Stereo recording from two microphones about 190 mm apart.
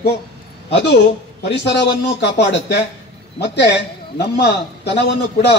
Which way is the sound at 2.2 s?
65° left (ahead or behind).